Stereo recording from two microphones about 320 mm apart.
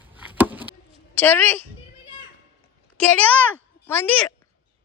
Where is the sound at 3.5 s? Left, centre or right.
Centre.